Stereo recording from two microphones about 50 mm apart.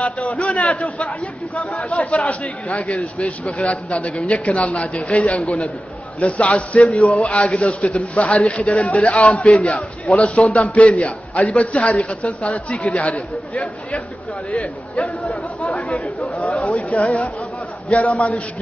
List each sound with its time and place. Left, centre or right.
0.0 s a man's voice: left
15.6 s a man's voice: left